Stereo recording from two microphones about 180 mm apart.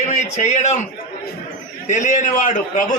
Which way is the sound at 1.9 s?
45° left (ahead or behind).